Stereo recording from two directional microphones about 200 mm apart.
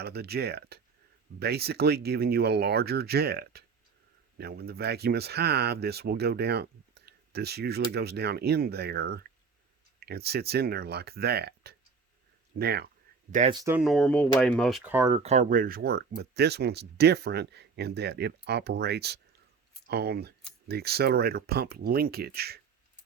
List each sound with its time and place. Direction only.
0.0 s speech: 55° right (ahead or behind)
13.5 s speech: 20° right (ahead or behind)
13.7 s speech: centre (ahead or behind)
14.9 s speech: 15° right (ahead or behind)
15.2 s speech: 35° right (ahead or behind); by 22.6 s 50° right (ahead or behind)